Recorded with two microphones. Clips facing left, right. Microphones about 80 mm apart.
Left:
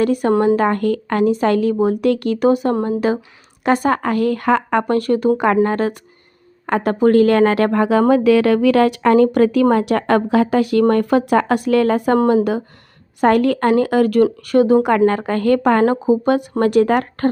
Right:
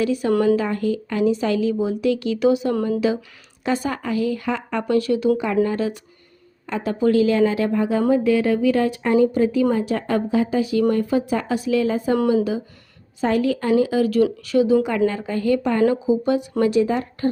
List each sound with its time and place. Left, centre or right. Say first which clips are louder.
0.0 s a woman's voice: left 4 dB; left
2.7 s speech: left 2 dB; left
3.6 s a woman's voice: left 7 dB; left
12.1 s a woman's voice: left 3 dB; left
13.2 s a woman's voice: left 6 dB; left